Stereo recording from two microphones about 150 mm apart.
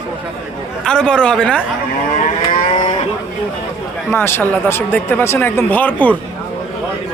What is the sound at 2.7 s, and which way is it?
Moo, 40° left (ahead or behind).